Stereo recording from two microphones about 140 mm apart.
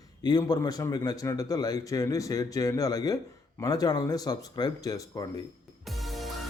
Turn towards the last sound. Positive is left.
turn(degrees=0)  # may be behind; listen again after turning